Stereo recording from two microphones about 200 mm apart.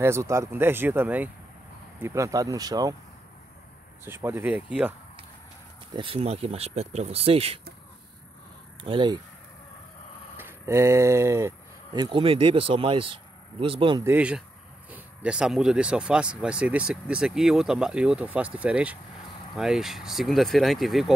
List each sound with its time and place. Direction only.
0.0 s speech: 15° right (ahead or behind)
4.0 s speech: 10° right (ahead or behind)
5.9 s speech: 30° right (ahead or behind)
8.8 s speech: 25° right (ahead or behind)
10.3 s speech: 10° right (ahead or behind)
14.1 s speech: 5° right (ahead or behind)